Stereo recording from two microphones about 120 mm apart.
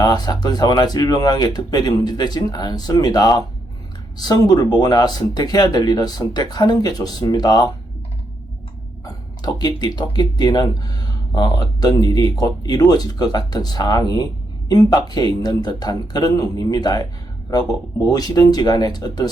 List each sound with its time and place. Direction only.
0.0 s speech: 35° left (ahead or behind)
9.0 s speech: 35° left (ahead or behind)